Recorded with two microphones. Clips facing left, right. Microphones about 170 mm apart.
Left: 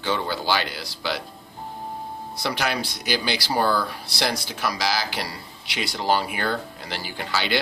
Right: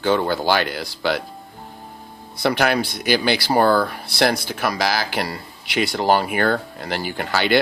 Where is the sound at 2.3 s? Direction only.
55° right (ahead or behind).